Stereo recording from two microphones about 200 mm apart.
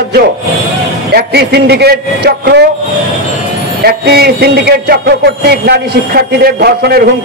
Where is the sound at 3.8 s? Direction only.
50° right (ahead or behind).